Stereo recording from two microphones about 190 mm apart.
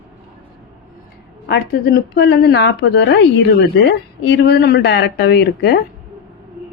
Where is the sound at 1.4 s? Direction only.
55° left (ahead or behind).